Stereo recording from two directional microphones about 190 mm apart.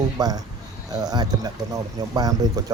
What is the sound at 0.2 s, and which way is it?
Speech, 20° right (ahead or behind).